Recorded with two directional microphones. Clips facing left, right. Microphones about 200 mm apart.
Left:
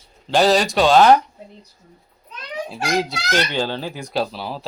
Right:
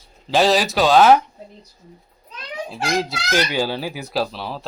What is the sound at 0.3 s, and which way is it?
Speech, centre (ahead or behind).